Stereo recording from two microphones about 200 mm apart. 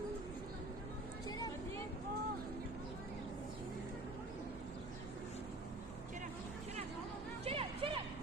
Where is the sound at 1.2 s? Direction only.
20° left (ahead or behind).